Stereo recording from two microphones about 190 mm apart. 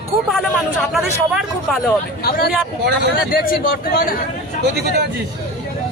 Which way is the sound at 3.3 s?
50° left (ahead or behind).